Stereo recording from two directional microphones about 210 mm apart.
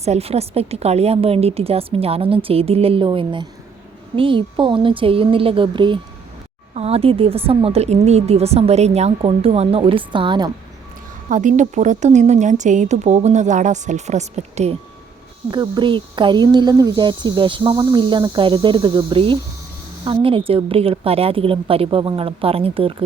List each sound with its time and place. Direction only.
0.0 s speech: 30° right (ahead or behind)
11.3 s a woman's voice: 35° right (ahead or behind)
15.4 s speech: 20° right (ahead or behind)